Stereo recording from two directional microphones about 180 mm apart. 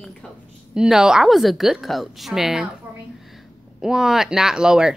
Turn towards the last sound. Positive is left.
turn(degrees=-5)  # may be behind; listen again after turning